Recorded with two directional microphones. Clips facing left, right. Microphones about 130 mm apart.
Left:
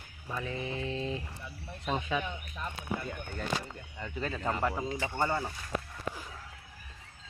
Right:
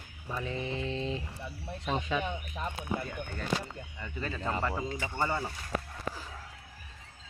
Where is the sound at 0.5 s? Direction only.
30° right (ahead or behind).